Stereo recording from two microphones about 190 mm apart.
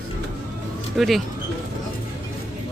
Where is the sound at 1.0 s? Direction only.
Centre (ahead or behind).